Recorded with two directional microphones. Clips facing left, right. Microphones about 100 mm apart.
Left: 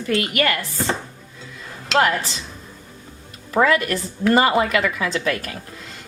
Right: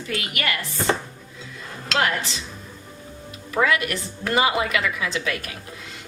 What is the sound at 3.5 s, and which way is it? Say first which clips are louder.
A woman's voice: left 4 dB; 35° left (ahead or behind).